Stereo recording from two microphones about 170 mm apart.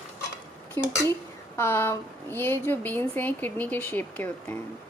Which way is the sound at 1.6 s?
15° left (ahead or behind).